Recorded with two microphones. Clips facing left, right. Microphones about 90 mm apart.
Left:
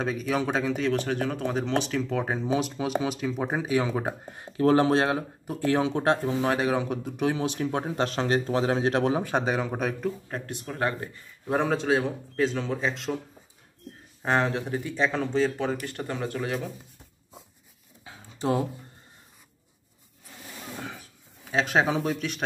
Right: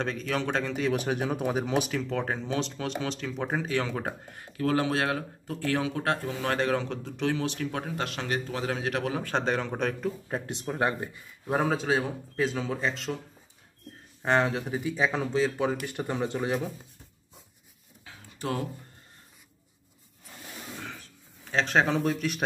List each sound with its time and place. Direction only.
0.0 s speech: 5° left (ahead or behind)
0.9 s speech: 10° right (ahead or behind)
2.0 s speech: 5° left (ahead or behind); by 9.2 s 30° left (ahead or behind)
9.2 s speech: 10° left (ahead or behind)
10.2 s speech: 15° right (ahead or behind)
11.4 s speech: 5° right (ahead or behind)
14.2 s speech: centre (ahead or behind); by 16.5 s 20° right (ahead or behind)
18.0 s a sound: 20° left (ahead or behind)
20.8 s a sound: 10° left (ahead or behind)